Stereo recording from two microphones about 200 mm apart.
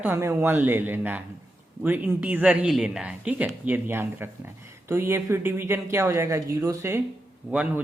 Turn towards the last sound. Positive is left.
turn(degrees=-5)  # may be behind; listen again after turning